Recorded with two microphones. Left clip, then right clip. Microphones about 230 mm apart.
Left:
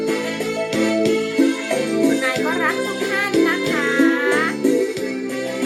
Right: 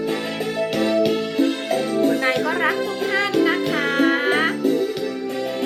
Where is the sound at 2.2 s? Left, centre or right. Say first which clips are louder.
Even; centre.